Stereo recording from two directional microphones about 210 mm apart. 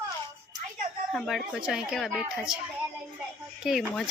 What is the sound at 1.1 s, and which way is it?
Speech, centre (ahead or behind).